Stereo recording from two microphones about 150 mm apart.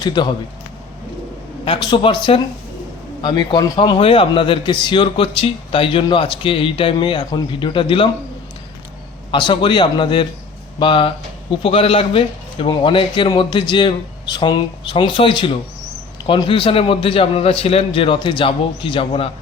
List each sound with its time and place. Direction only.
0.0 s a man's voice: 30° left (ahead or behind)
1.6 s a man's voice: 35° left (ahead or behind)
9.3 s a man's voice: 35° left (ahead or behind)